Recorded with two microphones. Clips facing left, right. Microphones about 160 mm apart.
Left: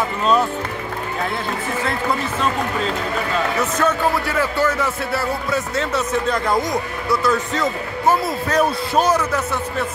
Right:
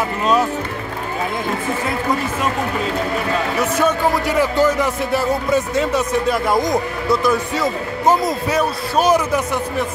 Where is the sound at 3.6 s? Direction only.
10° right (ahead or behind).